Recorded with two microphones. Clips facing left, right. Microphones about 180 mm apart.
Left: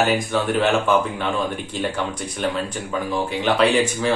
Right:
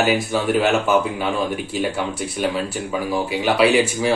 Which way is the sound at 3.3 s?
5° right (ahead or behind).